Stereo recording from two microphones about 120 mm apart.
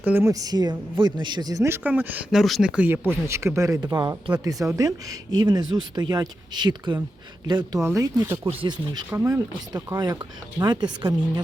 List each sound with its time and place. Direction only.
0.0 s speech: 15° right (ahead or behind)
0.3 s speech: 35° right (ahead or behind)
1.6 s speech: 15° right (ahead or behind)
2.3 s speech: centre (ahead or behind); by 7.8 s 35° right (ahead or behind)
7.8 s speech: 25° right (ahead or behind)
9.7 s speech: 35° right (ahead or behind)